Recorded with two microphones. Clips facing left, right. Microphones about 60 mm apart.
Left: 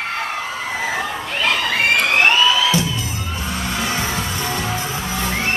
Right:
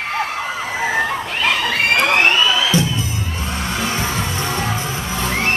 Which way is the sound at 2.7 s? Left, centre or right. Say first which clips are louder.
Right 2 dB; right.